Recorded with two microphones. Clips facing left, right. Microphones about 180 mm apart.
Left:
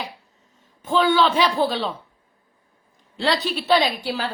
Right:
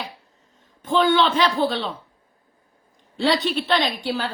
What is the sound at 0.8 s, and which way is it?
Speech, 5° left (ahead or behind).